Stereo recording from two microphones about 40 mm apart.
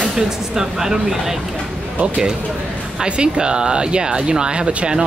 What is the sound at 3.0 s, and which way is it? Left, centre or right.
Speech, right.